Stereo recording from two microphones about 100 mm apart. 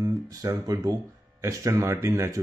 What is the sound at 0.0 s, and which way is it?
Speech, 35° right (ahead or behind).